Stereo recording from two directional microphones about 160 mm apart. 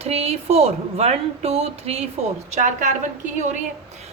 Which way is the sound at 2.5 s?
50° right (ahead or behind).